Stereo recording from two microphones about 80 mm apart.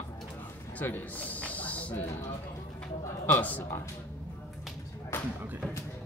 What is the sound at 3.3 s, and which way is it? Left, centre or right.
Speech, left.